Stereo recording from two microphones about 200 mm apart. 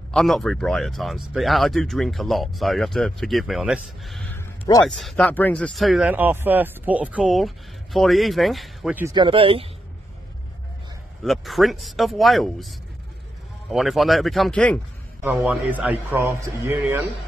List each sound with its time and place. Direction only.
0.1 s speech: centre (ahead or behind)
9.0 s speech: 25° right (ahead or behind)
11.2 s speech: centre (ahead or behind)
15.2 s a man's voice: 10° right (ahead or behind)